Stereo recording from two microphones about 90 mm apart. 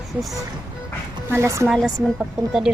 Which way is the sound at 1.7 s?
5° right (ahead or behind).